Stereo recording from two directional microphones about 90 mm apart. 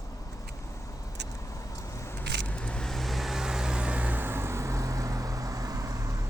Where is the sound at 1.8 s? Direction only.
35° left (ahead or behind).